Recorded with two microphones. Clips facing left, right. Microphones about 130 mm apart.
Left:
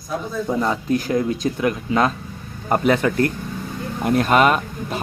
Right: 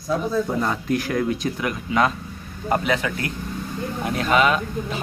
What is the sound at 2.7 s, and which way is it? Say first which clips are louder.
A man's voice: left 4 dB; 45° left (ahead or behind).